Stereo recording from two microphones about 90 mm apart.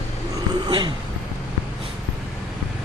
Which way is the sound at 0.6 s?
55° right (ahead or behind).